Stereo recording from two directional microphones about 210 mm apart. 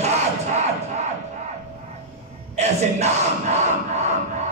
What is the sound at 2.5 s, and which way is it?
Speech, 30° right (ahead or behind).